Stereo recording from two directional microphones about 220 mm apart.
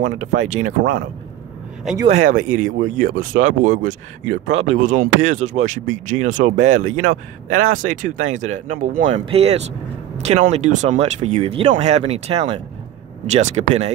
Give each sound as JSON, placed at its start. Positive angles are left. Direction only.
{"t": 0.0, "sound": "speech", "side_deg": -30}
{"t": 1.8, "sound": "speech", "side_deg": 0}
{"t": 2.2, "sound": "speech", "side_deg": -35}